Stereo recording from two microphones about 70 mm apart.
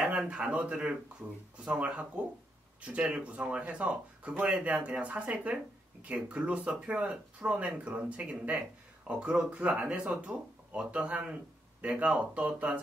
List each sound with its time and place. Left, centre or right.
0.2 s speech: centre